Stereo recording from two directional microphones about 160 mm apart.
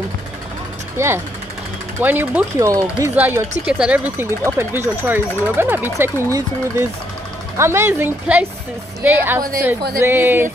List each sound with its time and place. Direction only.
0.9 s speech: 15° right (ahead or behind)
7.5 s speech: 15° right (ahead or behind)